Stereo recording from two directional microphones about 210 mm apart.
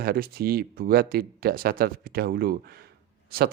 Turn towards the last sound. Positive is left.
turn(degrees=-45)  # may be behind; listen again after turning